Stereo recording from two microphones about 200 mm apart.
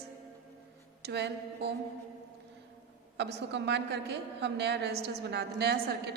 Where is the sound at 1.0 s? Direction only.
55° right (ahead or behind).